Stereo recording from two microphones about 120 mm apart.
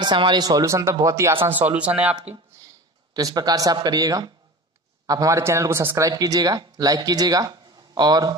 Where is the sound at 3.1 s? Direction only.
35° right (ahead or behind).